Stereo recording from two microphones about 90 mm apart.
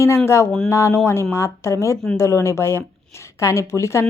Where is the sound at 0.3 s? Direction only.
30° left (ahead or behind).